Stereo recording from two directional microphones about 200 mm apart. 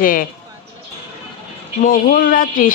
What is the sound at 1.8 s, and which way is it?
Speech, 45° left (ahead or behind).